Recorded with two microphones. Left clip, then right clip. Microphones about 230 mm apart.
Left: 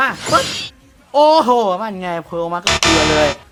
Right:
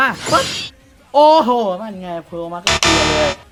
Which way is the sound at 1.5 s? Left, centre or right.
Centre.